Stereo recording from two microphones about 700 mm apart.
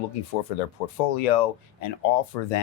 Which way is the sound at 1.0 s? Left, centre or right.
Left.